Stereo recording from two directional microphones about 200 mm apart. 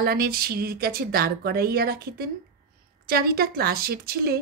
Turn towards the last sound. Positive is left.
turn(degrees=-50)  # may be behind; listen again after turning